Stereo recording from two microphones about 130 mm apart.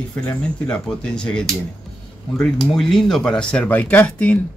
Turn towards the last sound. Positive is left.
turn(degrees=10)  # may be behind; listen again after turning